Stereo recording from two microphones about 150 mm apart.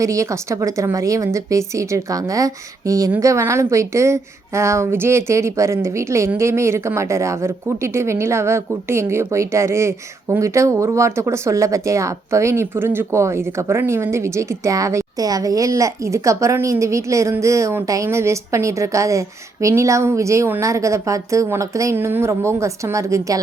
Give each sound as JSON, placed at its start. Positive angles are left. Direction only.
{"t": 0.0, "sound": "a woman's voice", "side_deg": -20}